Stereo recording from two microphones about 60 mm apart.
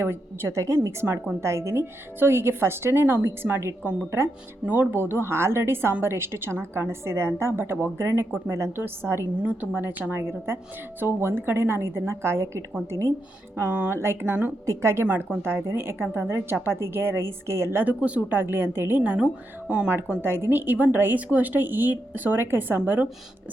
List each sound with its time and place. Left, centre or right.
0.0 s a woman's voice: right
0.9 s a woman's voice: right
1.4 s a woman's voice: right
8.7 s a woman's voice: right
9.4 s speech: right
10.2 s a woman's voice: right
13.6 s a woman's voice: right
14.7 s a woman's voice: right
15.0 s speech: right
15.4 s a woman's voice: right
17.8 s a woman's voice: right
19.9 s a woman's voice: right